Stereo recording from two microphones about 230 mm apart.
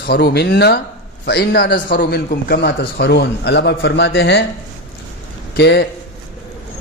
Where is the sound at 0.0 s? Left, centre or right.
Left.